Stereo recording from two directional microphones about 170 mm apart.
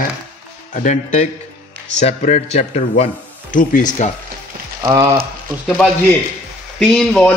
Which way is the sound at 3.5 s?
50° left (ahead or behind).